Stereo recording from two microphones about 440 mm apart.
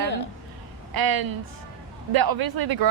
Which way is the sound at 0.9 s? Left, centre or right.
Right.